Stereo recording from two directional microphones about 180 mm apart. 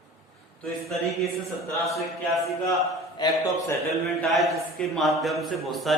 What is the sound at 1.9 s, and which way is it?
Speech, centre (ahead or behind).